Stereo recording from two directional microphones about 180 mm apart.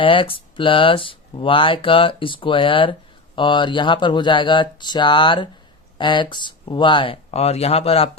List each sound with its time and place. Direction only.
0.0 s speech: 30° left (ahead or behind)